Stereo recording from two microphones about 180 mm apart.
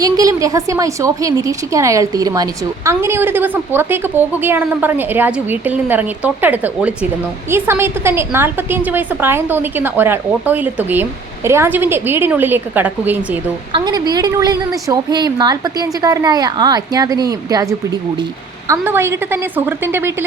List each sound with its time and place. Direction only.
0.0 s a woman's voice: 20° right (ahead or behind)
13.7 s a woman's voice: 25° right (ahead or behind)